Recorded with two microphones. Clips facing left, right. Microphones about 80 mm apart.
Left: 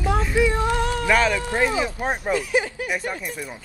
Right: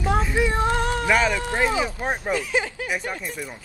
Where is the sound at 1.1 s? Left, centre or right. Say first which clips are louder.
Left 1 dB; centre.